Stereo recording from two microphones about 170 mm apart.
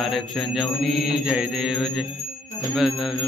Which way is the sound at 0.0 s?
Centre (ahead or behind).